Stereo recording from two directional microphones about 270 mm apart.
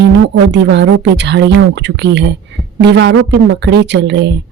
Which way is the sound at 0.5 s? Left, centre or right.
Right.